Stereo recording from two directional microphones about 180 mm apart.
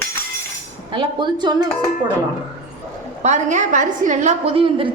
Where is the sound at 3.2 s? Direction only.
40° right (ahead or behind).